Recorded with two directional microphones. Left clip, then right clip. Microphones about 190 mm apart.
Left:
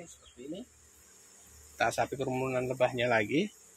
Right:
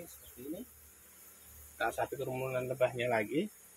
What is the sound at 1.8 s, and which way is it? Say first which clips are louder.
Speech: left 5 dB; 45° left (ahead or behind).